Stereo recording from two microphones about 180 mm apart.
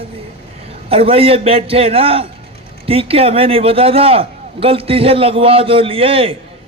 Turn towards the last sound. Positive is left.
turn(degrees=-30)  # may be behind; listen again after turning